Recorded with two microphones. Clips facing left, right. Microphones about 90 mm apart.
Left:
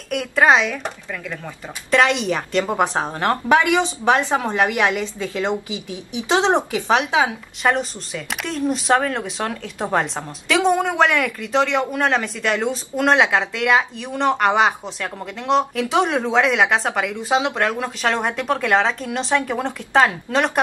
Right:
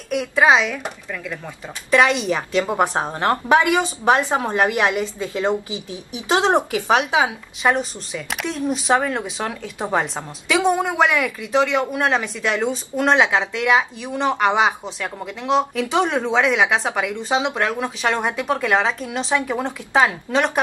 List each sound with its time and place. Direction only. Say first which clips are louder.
0.1 s a woman's voice: even; 5° right (ahead or behind); by 5.5 s 20° right (ahead or behind)
6.5 s speech: right 1 dB; 5° right (ahead or behind)